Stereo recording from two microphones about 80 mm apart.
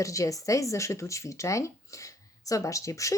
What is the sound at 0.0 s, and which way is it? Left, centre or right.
Speech, left.